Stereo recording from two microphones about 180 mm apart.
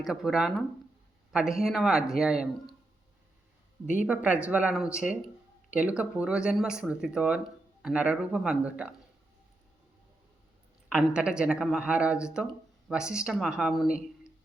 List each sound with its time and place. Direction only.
0.0 s speech: centre (ahead or behind)
4.0 s speech: 5° right (ahead or behind)
10.8 s speech: 5° right (ahead or behind)